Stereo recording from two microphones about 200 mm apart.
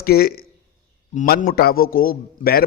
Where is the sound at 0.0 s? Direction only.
50° left (ahead or behind).